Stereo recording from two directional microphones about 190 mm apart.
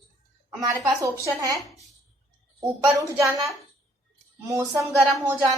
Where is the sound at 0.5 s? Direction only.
15° right (ahead or behind).